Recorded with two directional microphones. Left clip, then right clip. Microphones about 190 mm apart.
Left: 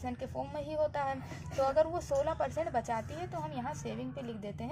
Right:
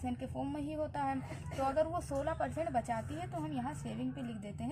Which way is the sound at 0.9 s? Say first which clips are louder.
Left 2 dB; 45° left (ahead or behind).